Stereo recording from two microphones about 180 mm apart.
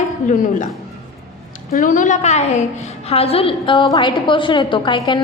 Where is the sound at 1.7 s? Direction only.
45° left (ahead or behind).